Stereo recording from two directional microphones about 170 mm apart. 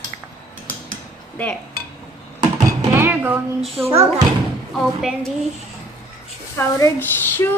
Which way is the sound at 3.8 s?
15° right (ahead or behind).